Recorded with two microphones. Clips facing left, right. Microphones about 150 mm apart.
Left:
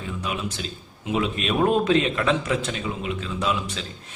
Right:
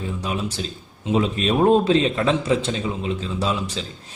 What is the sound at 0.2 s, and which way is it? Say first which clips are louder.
A man's voice: right 1 dB; 35° right (ahead or behind).